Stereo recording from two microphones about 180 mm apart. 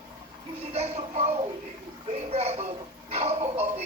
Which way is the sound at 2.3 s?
35° right (ahead or behind).